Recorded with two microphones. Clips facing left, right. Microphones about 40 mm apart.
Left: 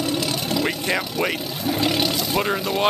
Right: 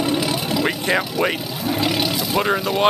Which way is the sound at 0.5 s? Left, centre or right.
Centre.